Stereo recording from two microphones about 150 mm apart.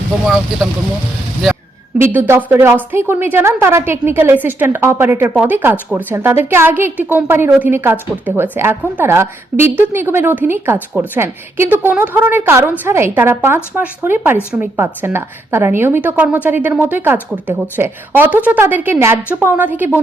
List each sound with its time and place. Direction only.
2.0 s a woman's voice: 15° right (ahead or behind)